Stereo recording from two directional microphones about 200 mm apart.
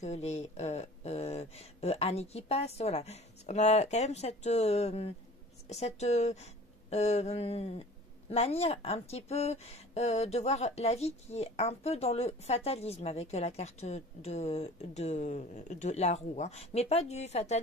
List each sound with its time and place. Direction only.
0.0 s speech: 35° left (ahead or behind)